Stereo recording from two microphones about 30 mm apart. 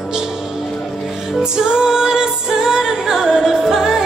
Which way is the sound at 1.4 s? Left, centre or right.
Right.